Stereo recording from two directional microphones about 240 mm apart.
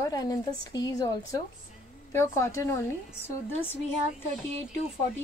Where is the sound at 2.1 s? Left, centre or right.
Centre.